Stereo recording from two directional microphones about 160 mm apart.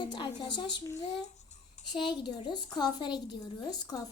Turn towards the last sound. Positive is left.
turn(degrees=25)  # may be behind; listen again after turning